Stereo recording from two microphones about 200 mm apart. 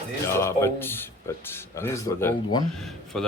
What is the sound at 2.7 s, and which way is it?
Speech, centre (ahead or behind).